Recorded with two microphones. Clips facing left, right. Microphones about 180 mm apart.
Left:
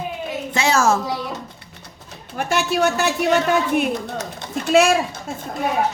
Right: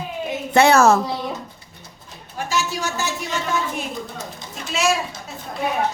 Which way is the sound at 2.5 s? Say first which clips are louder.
Left 6 dB; 60° left (ahead or behind).